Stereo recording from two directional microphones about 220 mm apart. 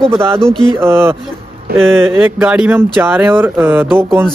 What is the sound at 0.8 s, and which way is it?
Speech, 10° right (ahead or behind).